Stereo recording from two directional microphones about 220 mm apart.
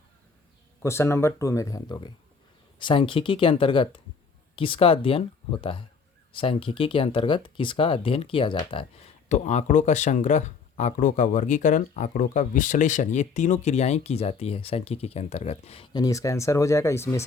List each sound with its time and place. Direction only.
0.8 s speech: 10° left (ahead or behind)